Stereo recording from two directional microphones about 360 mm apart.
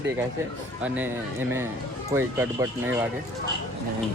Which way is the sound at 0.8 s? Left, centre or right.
Centre.